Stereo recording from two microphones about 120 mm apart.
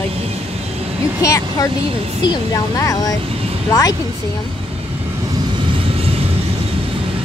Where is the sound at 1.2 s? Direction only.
25° left (ahead or behind).